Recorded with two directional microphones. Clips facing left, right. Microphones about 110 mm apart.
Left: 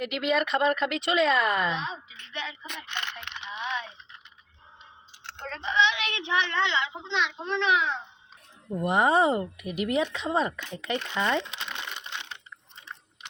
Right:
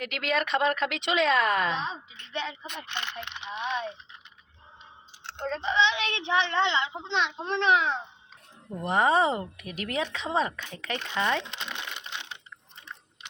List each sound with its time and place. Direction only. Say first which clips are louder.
0.0 s speech: left 3 dB; 5° left (ahead or behind)
1.8 s a woman's voice: right 1 dB; 35° right (ahead or behind)
5.2 s a woman's voice: right 5 dB; 25° right (ahead or behind)
8.7 s speech: left 1 dB; 10° left (ahead or behind)
11.1 s speech: right 1 dB; 5° right (ahead or behind)
11.7 s a sound: even; 5° left (ahead or behind)